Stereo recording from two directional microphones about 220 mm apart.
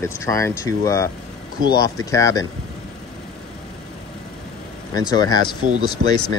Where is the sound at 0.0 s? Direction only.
15° left (ahead or behind).